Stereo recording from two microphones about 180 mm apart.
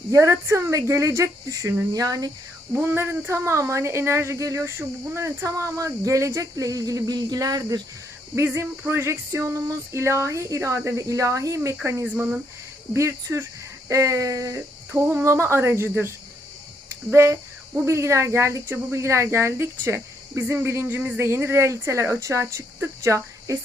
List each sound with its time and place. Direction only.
0.1 s speech: 15° right (ahead or behind)